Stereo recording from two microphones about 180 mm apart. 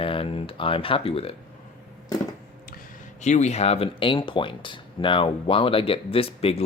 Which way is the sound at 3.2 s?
40° left (ahead or behind).